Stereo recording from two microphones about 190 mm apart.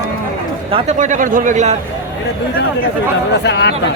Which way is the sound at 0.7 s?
30° right (ahead or behind).